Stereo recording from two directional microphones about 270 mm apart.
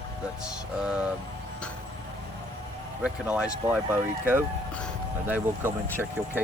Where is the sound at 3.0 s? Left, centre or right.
Centre.